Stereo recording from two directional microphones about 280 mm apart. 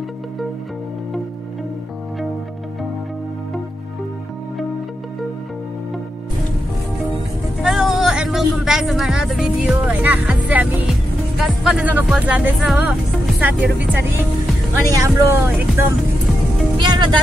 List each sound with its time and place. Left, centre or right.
7.6 s music: centre
11.3 s speech: centre
14.9 s speech: centre